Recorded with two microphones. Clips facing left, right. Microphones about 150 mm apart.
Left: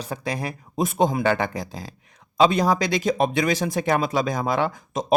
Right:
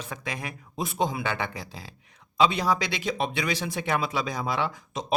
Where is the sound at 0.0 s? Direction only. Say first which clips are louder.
Left 7 dB; 35° left (ahead or behind).